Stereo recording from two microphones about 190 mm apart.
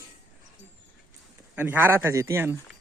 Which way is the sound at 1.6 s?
10° right (ahead or behind).